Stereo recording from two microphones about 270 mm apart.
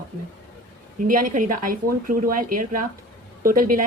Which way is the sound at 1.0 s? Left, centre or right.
Right.